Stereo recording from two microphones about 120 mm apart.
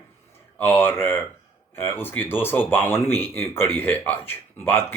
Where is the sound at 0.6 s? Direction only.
20° left (ahead or behind).